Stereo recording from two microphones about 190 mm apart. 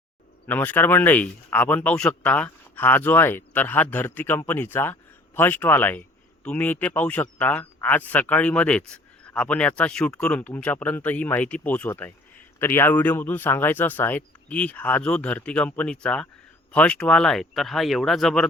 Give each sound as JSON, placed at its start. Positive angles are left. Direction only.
{"t": 0.4, "sound": "speech", "side_deg": 10}